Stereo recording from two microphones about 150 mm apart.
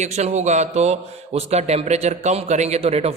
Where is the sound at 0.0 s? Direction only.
50° right (ahead or behind).